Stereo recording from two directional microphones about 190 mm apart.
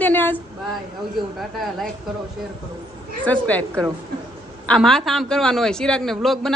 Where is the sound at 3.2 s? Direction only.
10° left (ahead or behind).